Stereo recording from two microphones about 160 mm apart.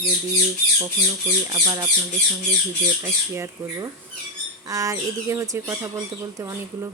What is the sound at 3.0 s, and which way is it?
Speech, 15° right (ahead or behind).